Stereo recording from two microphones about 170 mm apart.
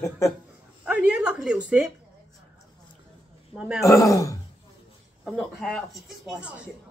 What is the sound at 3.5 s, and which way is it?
Speech, 5° right (ahead or behind).